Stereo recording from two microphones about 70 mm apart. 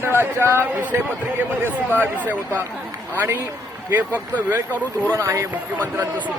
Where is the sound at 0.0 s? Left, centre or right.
Right.